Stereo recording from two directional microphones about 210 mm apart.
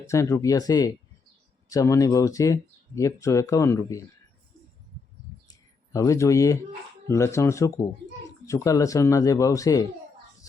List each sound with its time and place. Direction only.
0.1 s speech: 15° left (ahead or behind)
5.5 s a sound: 15° left (ahead or behind)
7.1 s speech: 15° left (ahead or behind)